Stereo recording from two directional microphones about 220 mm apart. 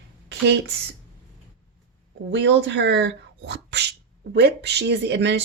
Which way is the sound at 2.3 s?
55° right (ahead or behind).